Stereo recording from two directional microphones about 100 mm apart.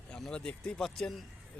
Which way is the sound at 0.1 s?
10° left (ahead or behind).